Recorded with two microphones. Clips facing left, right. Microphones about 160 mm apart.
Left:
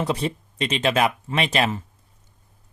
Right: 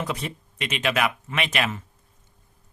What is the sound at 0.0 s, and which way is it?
Speech, 30° left (ahead or behind).